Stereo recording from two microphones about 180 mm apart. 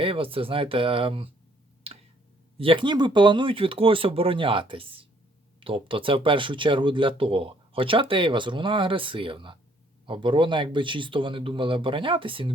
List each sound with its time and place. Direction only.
0.0 s speech: 30° right (ahead or behind)
1.9 s tick: 35° right (ahead or behind)
2.6 s speech: 30° right (ahead or behind)